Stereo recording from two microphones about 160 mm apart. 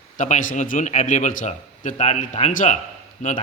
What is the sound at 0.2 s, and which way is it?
A man's voice, 55° left (ahead or behind).